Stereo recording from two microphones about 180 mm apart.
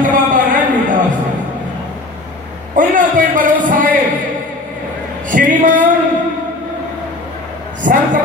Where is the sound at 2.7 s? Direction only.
50° right (ahead or behind).